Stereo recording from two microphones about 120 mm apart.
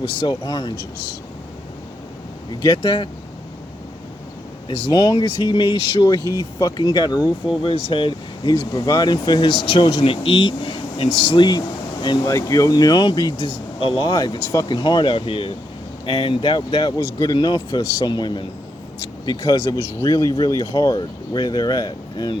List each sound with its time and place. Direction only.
0.2 s speech: 40° left (ahead or behind)
2.6 s speech: 40° left (ahead or behind)
4.9 s speech: 40° left (ahead or behind)
14.1 s speech: 30° left (ahead or behind)